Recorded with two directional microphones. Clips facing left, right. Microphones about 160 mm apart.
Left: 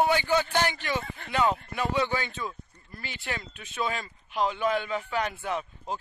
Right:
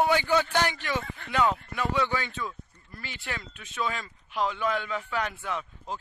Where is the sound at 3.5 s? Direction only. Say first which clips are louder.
Even; 15° left (ahead or behind).